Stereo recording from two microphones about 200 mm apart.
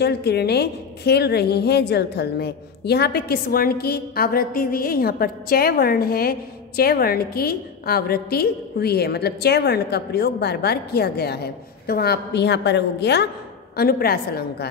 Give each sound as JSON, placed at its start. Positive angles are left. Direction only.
{"t": 0.0, "sound": "a woman's voice", "side_deg": 55}